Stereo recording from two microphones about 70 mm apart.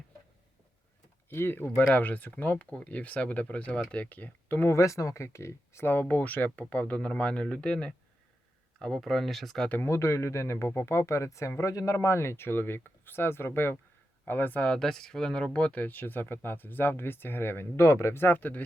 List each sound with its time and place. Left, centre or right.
1.3 s speech: left
4.7 s speech: left
5.8 s speech: left
8.8 s speech: centre
9.8 s speech: left
14.6 s speech: centre